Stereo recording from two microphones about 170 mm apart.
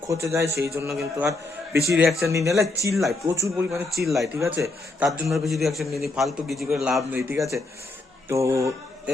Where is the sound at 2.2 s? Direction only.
15° right (ahead or behind).